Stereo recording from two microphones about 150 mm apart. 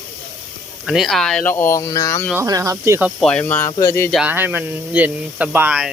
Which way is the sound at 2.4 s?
20° right (ahead or behind).